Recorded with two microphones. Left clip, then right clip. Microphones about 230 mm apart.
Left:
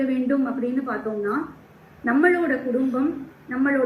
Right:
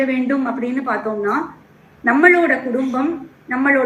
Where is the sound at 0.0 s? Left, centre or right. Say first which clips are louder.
Right 5 dB; right.